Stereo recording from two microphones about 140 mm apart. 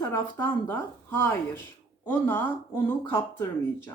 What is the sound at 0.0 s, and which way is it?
Speech, 15° left (ahead or behind).